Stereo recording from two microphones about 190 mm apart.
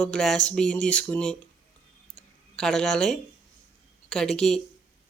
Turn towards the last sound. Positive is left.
turn(degrees=5)  # may be behind; listen again after turning